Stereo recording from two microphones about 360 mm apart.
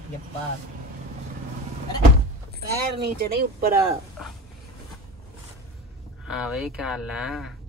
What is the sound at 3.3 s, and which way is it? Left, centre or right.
Speech, right.